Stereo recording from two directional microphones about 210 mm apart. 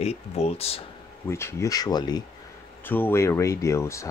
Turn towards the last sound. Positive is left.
turn(degrees=15)  # may be behind; listen again after turning